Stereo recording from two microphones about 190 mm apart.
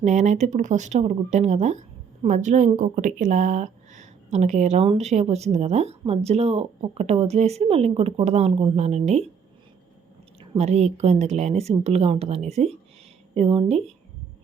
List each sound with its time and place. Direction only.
0.0 s a woman's voice: 40° right (ahead or behind)
10.4 s a woman's voice: 30° right (ahead or behind)